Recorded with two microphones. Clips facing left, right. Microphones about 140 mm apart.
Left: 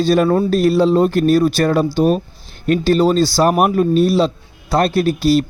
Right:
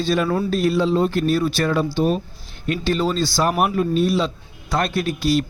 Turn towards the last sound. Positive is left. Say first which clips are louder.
# left 6 dB
turn(degrees=35)  # may be behind; listen again after turning